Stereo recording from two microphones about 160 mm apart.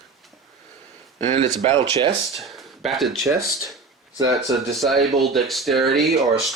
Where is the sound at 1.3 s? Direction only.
45° right (ahead or behind).